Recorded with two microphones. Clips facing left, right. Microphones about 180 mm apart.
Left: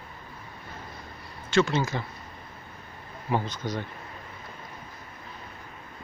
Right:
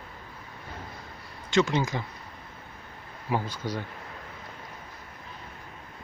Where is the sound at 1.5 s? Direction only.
20° right (ahead or behind).